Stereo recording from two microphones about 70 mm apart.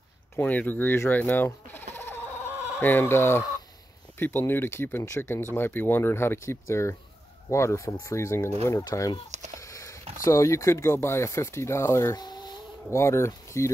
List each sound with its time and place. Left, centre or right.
0.4 s speech: left
1.2 s chicken: left
2.8 s speech: left
5.5 s speech: left
12.2 s a sound: left
12.9 s speech: left